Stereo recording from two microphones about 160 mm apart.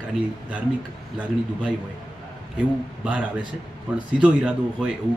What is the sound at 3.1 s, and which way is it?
Speech, 10° right (ahead or behind).